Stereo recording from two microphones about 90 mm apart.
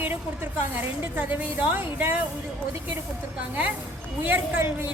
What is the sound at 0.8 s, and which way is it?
A woman's voice, 20° right (ahead or behind).